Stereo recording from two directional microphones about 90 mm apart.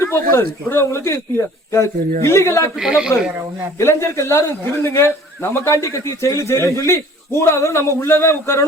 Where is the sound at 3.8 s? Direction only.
30° left (ahead or behind).